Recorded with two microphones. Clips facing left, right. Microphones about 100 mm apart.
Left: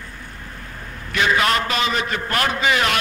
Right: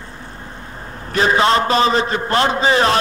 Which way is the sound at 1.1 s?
35° right (ahead or behind).